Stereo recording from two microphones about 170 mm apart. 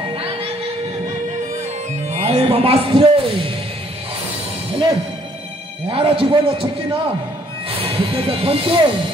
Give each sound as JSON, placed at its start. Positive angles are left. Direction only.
{"t": 2.1, "sound": "music", "side_deg": -40}
{"t": 5.9, "sound": "speech", "side_deg": -30}